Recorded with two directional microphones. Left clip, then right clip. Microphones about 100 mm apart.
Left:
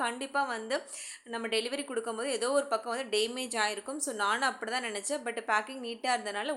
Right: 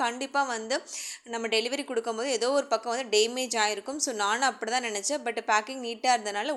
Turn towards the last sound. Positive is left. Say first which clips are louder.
# right 6 dB
turn(degrees=-20)  # may be behind; listen again after turning